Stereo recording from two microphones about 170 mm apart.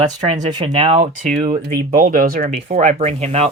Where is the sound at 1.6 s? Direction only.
60° right (ahead or behind); by 3.5 s 40° right (ahead or behind).